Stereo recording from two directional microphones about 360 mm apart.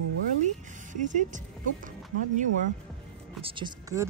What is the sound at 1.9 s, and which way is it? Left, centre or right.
Speech, right.